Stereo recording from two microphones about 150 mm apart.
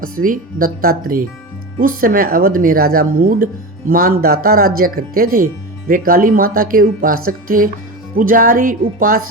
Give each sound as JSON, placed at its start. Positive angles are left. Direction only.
{"t": 0.0, "sound": "speech", "side_deg": -70}